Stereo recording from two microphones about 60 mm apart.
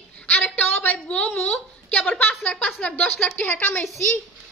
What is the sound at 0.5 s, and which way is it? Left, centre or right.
A woman's voice, left.